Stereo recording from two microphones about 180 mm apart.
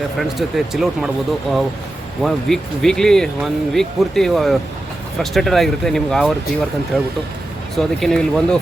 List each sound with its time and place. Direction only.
0.2 s speech: centre (ahead or behind)